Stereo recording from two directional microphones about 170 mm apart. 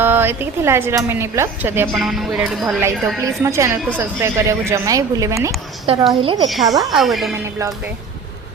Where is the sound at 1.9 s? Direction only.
Centre (ahead or behind).